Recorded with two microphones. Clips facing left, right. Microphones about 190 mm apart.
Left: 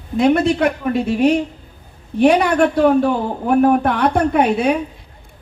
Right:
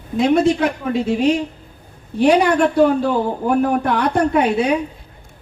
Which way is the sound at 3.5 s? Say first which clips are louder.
Left 5 dB; 55° left (ahead or behind).